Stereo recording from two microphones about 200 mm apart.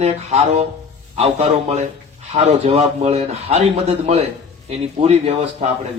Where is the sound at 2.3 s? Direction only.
30° right (ahead or behind).